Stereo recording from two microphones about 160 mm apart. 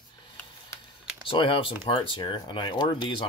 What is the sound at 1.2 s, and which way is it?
Speech, 35° left (ahead or behind).